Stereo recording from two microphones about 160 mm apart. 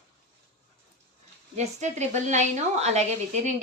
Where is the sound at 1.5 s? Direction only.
45° right (ahead or behind).